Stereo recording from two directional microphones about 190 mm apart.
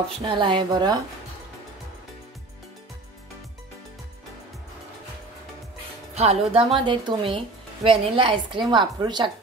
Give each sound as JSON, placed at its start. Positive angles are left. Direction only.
{"t": 0.3, "sound": "speech", "side_deg": -25}
{"t": 6.1, "sound": "speech", "side_deg": -30}